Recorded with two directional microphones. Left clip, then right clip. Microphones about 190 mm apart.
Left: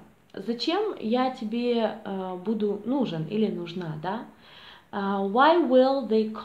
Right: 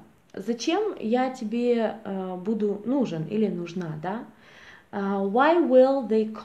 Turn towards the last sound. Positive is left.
turn(degrees=-25)  # may be behind; listen again after turning